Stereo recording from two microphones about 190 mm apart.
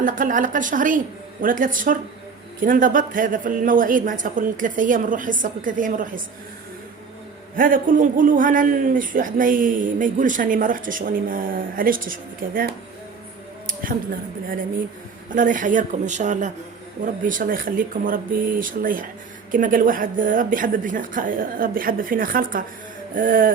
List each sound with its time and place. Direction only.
0.0 s a man's voice: 45° right (ahead or behind)
7.5 s a man's voice: 45° right (ahead or behind)
15.4 s a man's voice: 45° right (ahead or behind)